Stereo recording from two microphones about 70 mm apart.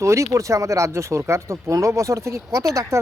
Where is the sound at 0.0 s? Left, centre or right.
Right.